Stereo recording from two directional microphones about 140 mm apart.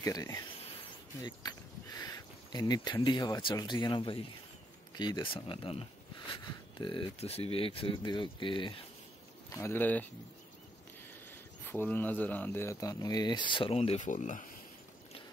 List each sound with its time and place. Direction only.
0.0 s speech: 25° left (ahead or behind)
9.5 s speech: 15° left (ahead or behind)
11.6 s speech: 15° left (ahead or behind); by 14.5 s 65° left (ahead or behind)